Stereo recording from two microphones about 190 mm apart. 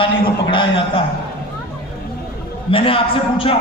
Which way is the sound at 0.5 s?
25° left (ahead or behind).